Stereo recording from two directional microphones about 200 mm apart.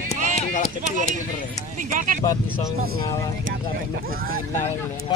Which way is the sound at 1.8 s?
40° right (ahead or behind).